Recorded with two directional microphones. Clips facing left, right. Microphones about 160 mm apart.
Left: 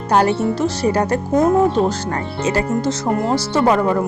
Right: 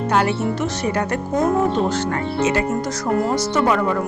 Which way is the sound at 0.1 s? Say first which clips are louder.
Left 5 dB; 35° left (ahead or behind).